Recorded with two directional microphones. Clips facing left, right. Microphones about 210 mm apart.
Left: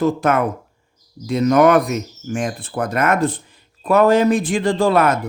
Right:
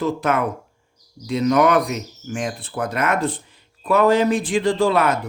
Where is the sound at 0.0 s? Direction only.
45° left (ahead or behind).